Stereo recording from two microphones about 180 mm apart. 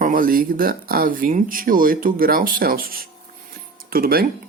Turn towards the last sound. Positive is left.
turn(degrees=-55)  # may be behind; listen again after turning